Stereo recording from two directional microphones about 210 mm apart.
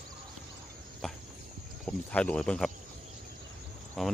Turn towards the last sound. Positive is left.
turn(degrees=0)  # may be behind; listen again after turning